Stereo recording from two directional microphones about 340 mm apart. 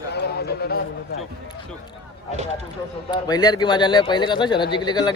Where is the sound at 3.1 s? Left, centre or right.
Centre.